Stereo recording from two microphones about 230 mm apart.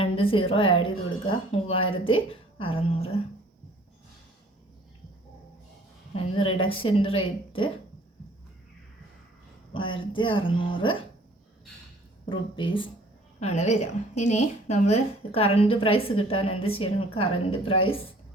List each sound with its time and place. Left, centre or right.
0.0 s a woman's voice: left
6.1 s a woman's voice: left
9.7 s a woman's voice: left
12.2 s a woman's voice: left